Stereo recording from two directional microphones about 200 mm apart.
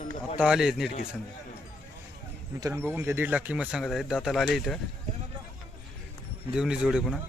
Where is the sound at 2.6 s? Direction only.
10° right (ahead or behind).